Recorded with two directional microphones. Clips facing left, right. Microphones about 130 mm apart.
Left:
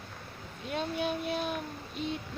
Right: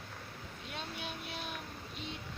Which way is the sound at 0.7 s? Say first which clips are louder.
Left 12 dB; 50° left (ahead or behind).